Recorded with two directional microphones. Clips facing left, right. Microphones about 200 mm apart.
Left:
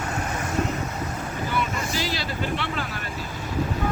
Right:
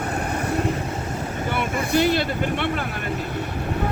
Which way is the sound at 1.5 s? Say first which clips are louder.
Right 5 dB; 60° right (ahead or behind).